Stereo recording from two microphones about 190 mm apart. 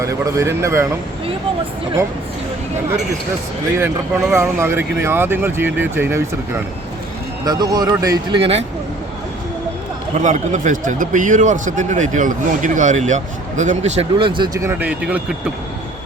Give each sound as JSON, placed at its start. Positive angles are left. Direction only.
{"t": 0.0, "sound": "speech", "side_deg": -15}
{"t": 3.8, "sound": "speech", "side_deg": -15}
{"t": 10.2, "sound": "a man's voice", "side_deg": -40}
{"t": 14.7, "sound": "speech", "side_deg": -10}